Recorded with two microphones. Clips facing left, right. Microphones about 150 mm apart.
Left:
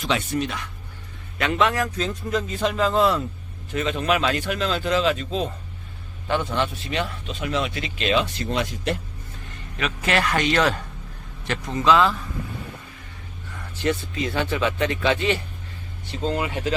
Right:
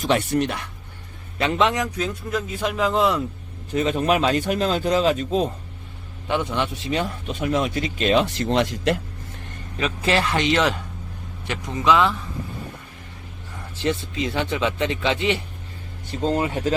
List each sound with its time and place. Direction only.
0.0 s speech: 60° right (ahead or behind)
1.4 s speech: 25° right (ahead or behind)
2.0 s speech: 5° right (ahead or behind)
3.7 s a man's voice: 40° right (ahead or behind)
6.9 s speech: 50° right (ahead or behind)
8.5 s speech: 90° right
9.7 s speech: 30° right (ahead or behind)
13.8 s speech: 25° right (ahead or behind)
16.2 s a man's voice: 40° right (ahead or behind)